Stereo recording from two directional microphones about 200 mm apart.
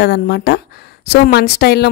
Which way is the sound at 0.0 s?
55° left (ahead or behind).